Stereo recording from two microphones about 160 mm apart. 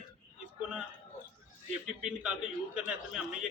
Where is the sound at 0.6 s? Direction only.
5° right (ahead or behind).